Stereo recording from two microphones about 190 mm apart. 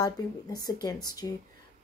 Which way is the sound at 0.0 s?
20° left (ahead or behind).